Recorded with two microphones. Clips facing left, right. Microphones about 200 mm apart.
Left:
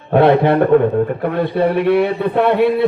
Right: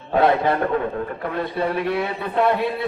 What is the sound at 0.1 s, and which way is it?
A man's voice, 65° left (ahead or behind).